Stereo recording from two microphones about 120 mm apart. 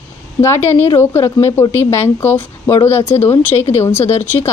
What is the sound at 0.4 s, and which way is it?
Speech, 20° left (ahead or behind).